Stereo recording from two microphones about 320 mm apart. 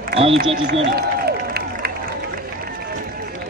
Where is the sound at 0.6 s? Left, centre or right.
Right.